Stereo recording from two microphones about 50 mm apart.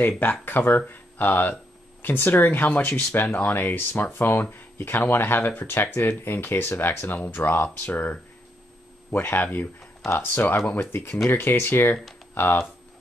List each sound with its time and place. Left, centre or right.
0.2 s speech: left
2.8 s speech: left
7.9 s speech: left